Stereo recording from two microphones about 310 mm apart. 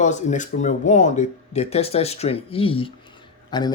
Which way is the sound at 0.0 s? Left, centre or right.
Left.